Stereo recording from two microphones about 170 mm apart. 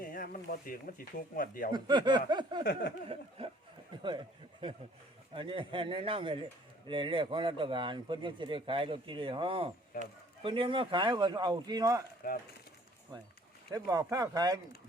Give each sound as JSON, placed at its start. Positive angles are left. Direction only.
{"t": 0.0, "sound": "speech", "side_deg": 55}
{"t": 1.7, "sound": "speech", "side_deg": -25}
{"t": 9.9, "sound": "a man's voice", "side_deg": 60}
{"t": 10.4, "sound": "speech", "side_deg": -30}
{"t": 12.2, "sound": "a man's voice", "side_deg": 60}
{"t": 13.7, "sound": "speech", "side_deg": -20}